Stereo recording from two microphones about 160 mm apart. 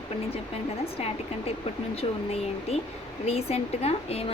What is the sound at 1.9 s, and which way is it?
Speech, 40° left (ahead or behind).